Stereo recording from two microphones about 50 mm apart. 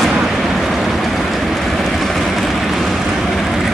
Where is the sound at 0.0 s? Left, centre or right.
Centre.